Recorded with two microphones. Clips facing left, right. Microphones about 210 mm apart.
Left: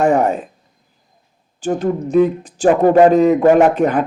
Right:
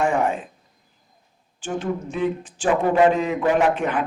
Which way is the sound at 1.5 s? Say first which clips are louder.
Left 8 dB; 40° left (ahead or behind).